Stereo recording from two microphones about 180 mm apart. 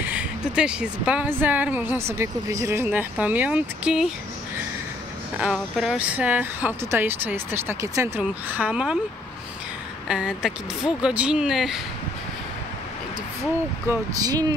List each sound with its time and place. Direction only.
0.0 s a woman's voice: 10° right (ahead or behind)
5.4 s a woman's voice: centre (ahead or behind)
10.0 s speech: 5° right (ahead or behind)
13.8 s speech: 20° right (ahead or behind)